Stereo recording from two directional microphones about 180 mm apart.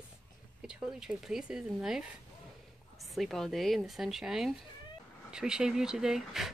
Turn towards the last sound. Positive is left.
turn(degrees=0)  # may be behind; listen again after turning